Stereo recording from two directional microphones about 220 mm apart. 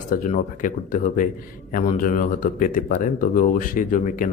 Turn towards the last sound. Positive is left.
turn(degrees=35)  # may be behind; listen again after turning